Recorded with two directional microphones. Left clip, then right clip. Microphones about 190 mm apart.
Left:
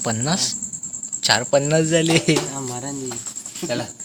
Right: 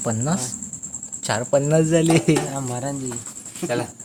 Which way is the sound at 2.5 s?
60° right (ahead or behind).